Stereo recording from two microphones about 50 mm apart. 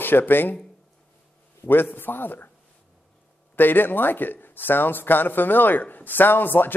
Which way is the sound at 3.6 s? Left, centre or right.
Left.